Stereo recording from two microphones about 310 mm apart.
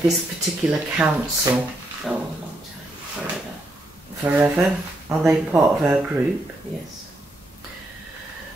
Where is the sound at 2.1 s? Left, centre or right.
Centre.